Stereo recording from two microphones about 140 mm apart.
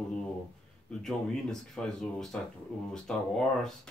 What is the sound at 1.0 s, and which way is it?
Speech, 5° left (ahead or behind).